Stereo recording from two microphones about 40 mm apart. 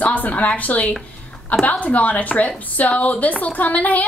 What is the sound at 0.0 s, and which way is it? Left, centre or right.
A woman's voice, left.